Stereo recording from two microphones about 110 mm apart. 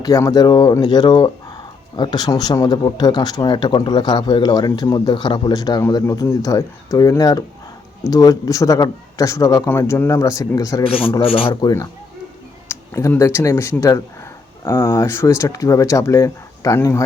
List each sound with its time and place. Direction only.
0.0 s speech: 35° left (ahead or behind)
4.9 s speech: 45° left (ahead or behind); by 10.8 s 30° left (ahead or behind)
10.8 s speech: 55° left (ahead or behind)
12.6 s speech: 20° left (ahead or behind)